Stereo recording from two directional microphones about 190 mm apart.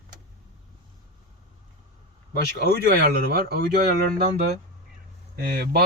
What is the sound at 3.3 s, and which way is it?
Speech, 55° right (ahead or behind).